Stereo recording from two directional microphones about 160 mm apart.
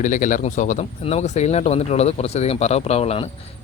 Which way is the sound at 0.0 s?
55° left (ahead or behind).